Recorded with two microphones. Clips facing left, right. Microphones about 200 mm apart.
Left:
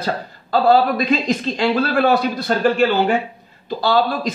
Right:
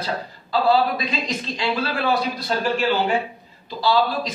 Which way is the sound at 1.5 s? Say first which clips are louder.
Left 6 dB; 55° left (ahead or behind).